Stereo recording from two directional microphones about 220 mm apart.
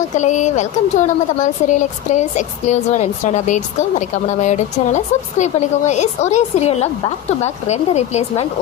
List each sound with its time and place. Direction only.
0.2 s a woman's voice: 35° left (ahead or behind)